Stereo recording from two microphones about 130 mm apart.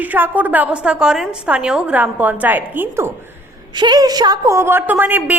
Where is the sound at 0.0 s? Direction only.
15° right (ahead or behind).